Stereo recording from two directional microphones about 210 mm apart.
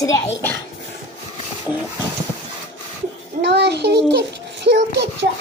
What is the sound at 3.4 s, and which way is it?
Child singing, 55° right (ahead or behind).